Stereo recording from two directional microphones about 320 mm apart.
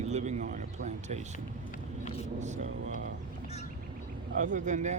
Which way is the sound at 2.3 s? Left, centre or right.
Right.